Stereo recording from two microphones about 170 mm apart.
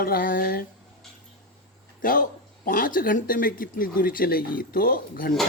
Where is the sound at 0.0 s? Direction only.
60° left (ahead or behind).